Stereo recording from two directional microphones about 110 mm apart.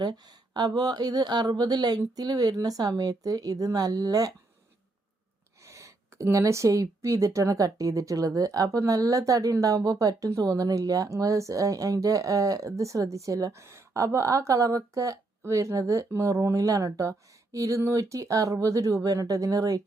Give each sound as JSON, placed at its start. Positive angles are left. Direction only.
{"t": 0.0, "sound": "speech", "side_deg": -40}
{"t": 5.6, "sound": "speech", "side_deg": -30}